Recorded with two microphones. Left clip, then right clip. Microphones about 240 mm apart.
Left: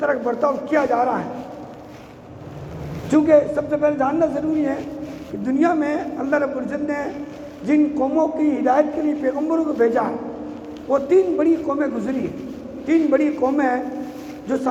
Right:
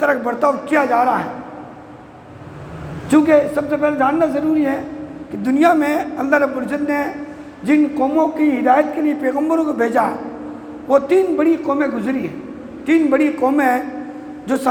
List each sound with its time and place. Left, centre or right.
0.0 s a man's voice: right
3.1 s a man's voice: right